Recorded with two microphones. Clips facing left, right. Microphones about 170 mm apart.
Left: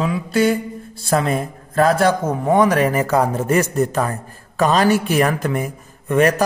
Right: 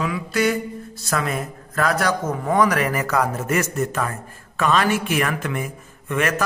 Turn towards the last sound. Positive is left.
turn(degrees=35)  # may be behind; listen again after turning